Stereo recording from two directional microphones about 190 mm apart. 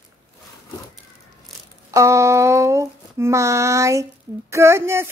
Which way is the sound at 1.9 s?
15° right (ahead or behind).